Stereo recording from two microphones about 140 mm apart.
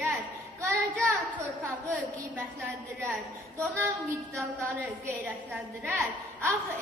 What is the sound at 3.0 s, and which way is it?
A woman's voice, 15° right (ahead or behind).